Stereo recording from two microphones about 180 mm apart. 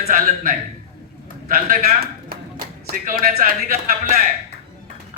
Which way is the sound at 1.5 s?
55° right (ahead or behind).